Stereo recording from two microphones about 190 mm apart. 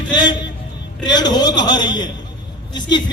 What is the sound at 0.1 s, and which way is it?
A man's voice, 25° left (ahead or behind).